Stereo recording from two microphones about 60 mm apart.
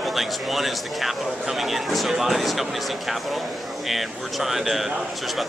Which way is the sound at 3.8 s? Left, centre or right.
Centre.